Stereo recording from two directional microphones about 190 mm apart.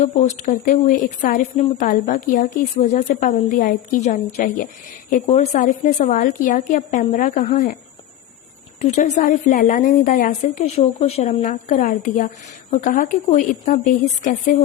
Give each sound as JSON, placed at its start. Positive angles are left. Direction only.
{"t": 0.0, "sound": "a woman's voice", "side_deg": 40}
{"t": 8.8, "sound": "a woman's voice", "side_deg": 35}
{"t": 11.3, "sound": "a woman's voice", "side_deg": 45}